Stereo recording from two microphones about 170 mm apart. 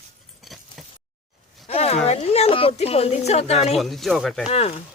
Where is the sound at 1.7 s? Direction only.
40° left (ahead or behind).